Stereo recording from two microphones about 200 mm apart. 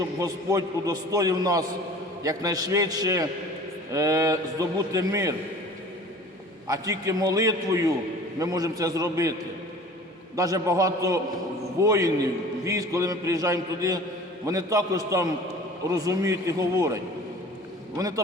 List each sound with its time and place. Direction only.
0.2 s a man's voice: 15° right (ahead or behind)
6.7 s a man's voice: 15° right (ahead or behind)
10.3 s a man's voice: 15° right (ahead or behind)